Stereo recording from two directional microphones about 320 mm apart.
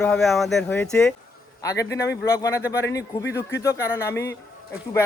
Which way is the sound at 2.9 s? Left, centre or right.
Left.